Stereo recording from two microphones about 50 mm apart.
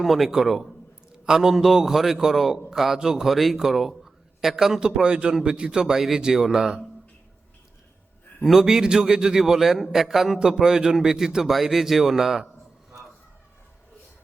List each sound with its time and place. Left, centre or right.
0.0 s a man's voice: centre
5.8 s a man's voice: centre
8.4 s a man's voice: centre